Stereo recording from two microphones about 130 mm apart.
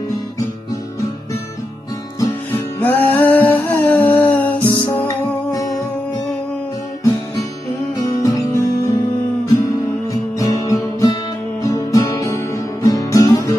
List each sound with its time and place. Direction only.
2.8 s a sound: 15° left (ahead or behind)
4.8 s music: 30° left (ahead or behind)
8.0 s music: 25° left (ahead or behind)
10.4 s music: 30° left (ahead or behind)